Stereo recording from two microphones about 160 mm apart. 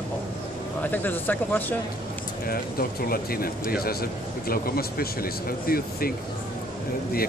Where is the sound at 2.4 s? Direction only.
70° left (ahead or behind).